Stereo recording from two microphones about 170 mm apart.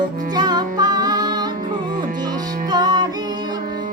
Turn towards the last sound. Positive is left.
turn(degrees=-25)  # may be behind; listen again after turning